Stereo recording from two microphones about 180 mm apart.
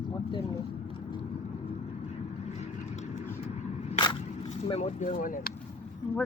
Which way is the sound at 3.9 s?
30° left (ahead or behind).